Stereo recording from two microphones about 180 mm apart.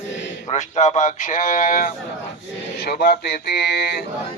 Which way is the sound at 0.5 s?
40° left (ahead or behind).